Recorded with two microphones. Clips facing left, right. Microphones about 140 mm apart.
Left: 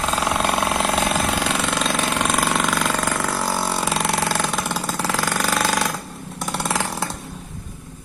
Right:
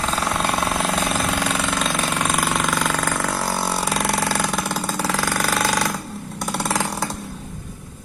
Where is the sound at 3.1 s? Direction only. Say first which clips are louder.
Even; centre (ahead or behind).